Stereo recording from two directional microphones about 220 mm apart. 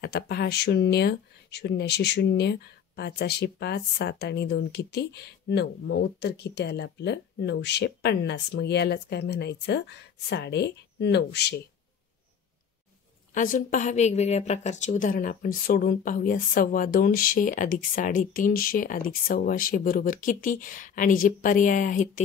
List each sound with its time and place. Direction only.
0.0 s speech: 45° left (ahead or behind)
13.3 s a woman's voice: 35° left (ahead or behind)